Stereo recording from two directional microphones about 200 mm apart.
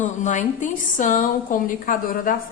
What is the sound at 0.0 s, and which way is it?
A woman's voice, 35° left (ahead or behind).